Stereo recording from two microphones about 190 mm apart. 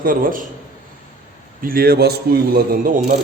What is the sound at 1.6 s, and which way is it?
A man's voice, 50° right (ahead or behind).